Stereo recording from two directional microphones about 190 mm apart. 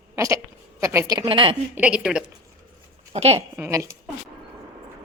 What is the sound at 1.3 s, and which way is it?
Speech, 25° right (ahead or behind).